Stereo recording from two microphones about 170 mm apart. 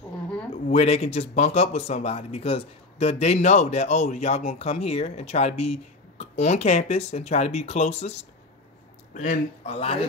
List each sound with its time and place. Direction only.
0.7 s speech: 40° left (ahead or behind)
9.8 s speech: 35° left (ahead or behind)